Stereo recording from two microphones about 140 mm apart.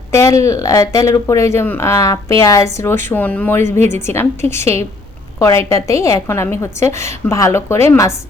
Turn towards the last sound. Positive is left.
turn(degrees=20)  # may be behind; listen again after turning